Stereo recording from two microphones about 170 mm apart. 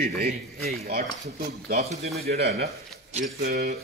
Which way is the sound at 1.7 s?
40° right (ahead or behind).